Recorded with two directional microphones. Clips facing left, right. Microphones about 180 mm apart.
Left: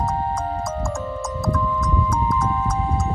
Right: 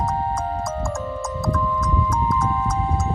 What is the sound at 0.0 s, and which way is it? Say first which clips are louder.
Music: even; centre (ahead or behind).